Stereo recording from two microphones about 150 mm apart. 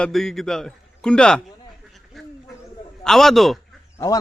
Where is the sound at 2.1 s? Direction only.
Centre (ahead or behind).